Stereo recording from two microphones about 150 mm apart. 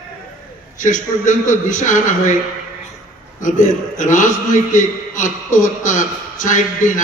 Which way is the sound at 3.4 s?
55° left (ahead or behind).